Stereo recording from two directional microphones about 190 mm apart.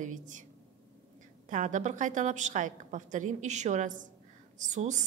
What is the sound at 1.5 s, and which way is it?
A woman's voice, 40° right (ahead or behind).